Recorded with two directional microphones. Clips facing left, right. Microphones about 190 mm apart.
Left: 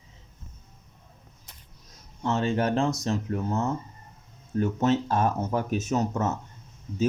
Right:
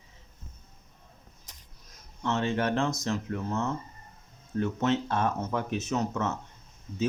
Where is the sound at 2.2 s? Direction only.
35° left (ahead or behind).